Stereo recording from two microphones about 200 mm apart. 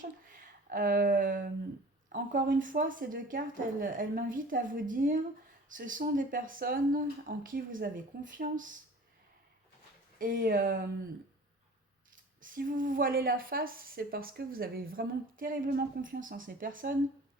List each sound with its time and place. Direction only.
0.7 s speech: 45° right (ahead or behind)
10.2 s speech: 45° right (ahead or behind)
12.4 s speech: 45° right (ahead or behind)